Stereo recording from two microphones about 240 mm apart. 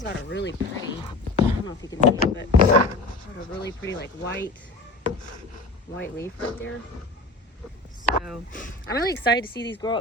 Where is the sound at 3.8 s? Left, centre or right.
Left.